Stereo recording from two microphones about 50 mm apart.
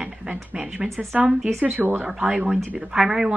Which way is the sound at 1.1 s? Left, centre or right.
Right.